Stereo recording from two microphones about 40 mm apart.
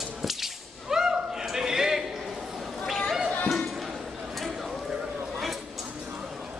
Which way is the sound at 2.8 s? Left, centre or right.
Centre.